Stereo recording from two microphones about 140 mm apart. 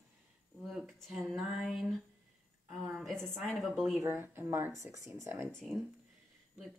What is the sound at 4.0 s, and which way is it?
Speech, 15° right (ahead or behind).